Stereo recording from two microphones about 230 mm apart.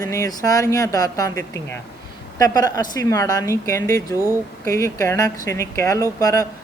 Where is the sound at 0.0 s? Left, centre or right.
Centre.